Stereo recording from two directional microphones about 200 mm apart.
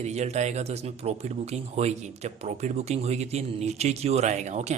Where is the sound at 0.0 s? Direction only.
35° right (ahead or behind).